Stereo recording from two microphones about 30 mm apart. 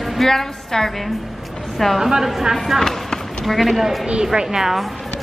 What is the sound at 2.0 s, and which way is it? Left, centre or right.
Speech, centre.